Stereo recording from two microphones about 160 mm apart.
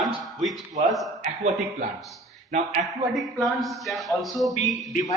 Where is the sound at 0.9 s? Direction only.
Centre (ahead or behind).